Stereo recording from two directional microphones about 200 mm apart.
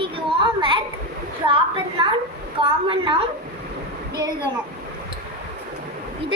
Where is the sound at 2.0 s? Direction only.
25° right (ahead or behind).